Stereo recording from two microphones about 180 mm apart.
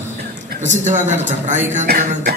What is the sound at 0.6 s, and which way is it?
A man's voice, 45° right (ahead or behind).